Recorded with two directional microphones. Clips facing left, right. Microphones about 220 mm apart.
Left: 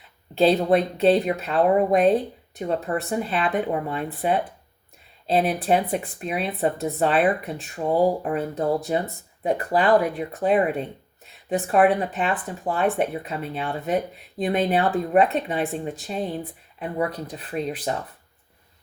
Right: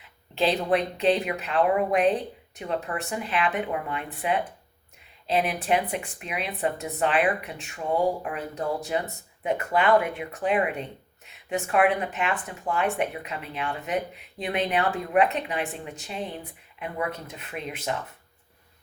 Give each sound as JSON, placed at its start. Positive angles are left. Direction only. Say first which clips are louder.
{"t": 0.3, "sound": "speech", "louder": "left 5 dB", "side_deg": 35}